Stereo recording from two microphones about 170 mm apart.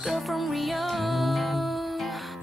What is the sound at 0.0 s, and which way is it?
Music, centre (ahead or behind).